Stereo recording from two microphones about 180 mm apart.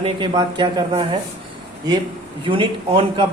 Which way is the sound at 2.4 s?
30° right (ahead or behind).